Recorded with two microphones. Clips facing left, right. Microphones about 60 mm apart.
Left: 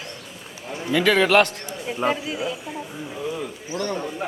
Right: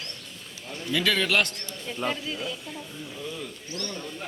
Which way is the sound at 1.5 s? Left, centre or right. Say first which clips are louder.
Left 6 dB; centre.